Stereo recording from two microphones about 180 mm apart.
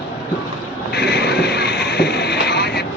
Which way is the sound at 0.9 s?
65° left (ahead or behind).